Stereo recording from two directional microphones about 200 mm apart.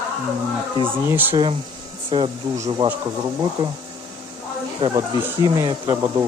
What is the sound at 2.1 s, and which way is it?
Speech, 25° right (ahead or behind).